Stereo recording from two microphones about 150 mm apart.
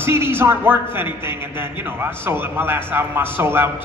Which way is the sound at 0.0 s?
15° right (ahead or behind).